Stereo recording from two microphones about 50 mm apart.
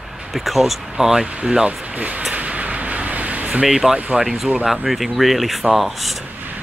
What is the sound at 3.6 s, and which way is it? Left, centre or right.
Speech, centre.